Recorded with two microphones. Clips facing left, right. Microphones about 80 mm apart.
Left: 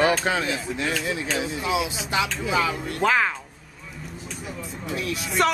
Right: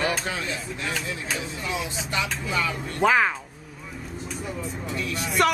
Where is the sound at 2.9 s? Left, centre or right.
Centre.